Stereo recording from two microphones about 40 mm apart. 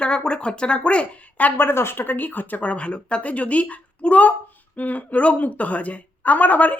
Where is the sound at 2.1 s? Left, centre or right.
Left.